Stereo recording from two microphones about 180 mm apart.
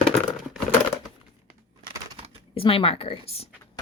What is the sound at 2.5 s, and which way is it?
Speech, 30° left (ahead or behind).